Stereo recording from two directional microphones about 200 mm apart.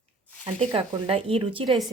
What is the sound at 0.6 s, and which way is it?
A woman's voice, 30° right (ahead or behind).